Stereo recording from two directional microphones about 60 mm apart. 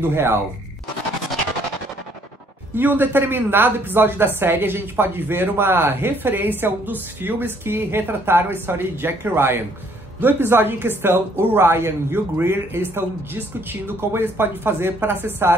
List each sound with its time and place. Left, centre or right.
0.0 s a woman's voice: right
2.7 s a woman's voice: right